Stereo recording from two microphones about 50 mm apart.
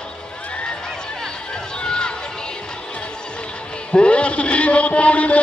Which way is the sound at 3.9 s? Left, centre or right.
Left.